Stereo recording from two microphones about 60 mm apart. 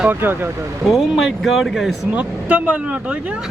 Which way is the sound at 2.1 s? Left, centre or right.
Right.